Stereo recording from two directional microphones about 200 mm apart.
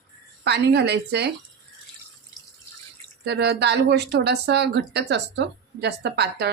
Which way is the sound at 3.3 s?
55° right (ahead or behind).